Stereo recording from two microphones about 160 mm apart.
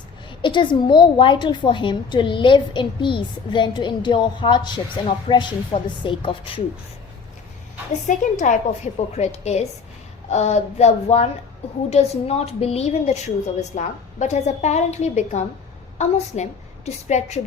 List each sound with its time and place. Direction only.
0.3 s a woman's voice: 30° left (ahead or behind)
8.0 s a woman's voice: 50° left (ahead or behind)